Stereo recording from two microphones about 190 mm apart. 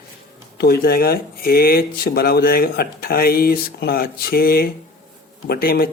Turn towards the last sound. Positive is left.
turn(degrees=50)  # may be behind; listen again after turning